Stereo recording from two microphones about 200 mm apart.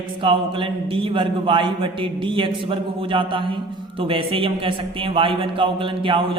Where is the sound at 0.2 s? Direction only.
25° right (ahead or behind).